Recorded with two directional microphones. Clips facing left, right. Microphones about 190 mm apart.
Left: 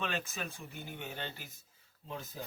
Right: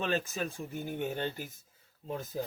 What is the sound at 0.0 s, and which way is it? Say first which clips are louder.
Speech: right 6 dB; 40° right (ahead or behind).